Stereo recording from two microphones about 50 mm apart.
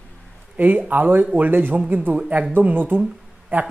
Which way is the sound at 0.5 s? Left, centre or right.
Right.